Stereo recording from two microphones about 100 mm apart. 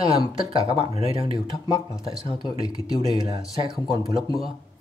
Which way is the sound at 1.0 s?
60° right (ahead or behind).